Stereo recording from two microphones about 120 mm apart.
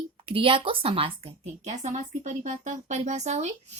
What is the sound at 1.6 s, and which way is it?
A woman's voice, 75° right (ahead or behind).